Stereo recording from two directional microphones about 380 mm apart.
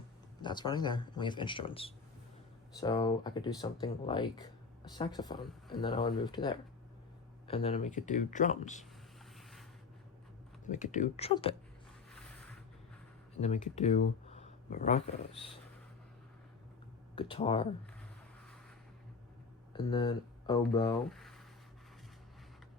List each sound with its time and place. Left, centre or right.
0.4 s speech: centre
10.7 s speech: centre
13.4 s speech: centre
17.2 s speech: centre
19.7 s speech: centre
21.1 s a sound: centre